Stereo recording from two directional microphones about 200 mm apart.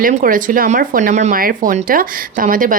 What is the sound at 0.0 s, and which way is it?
Speech, 45° right (ahead or behind).